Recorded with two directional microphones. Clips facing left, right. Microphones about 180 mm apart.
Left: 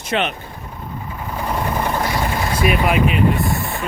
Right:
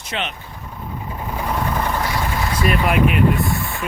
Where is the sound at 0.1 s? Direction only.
55° left (ahead or behind).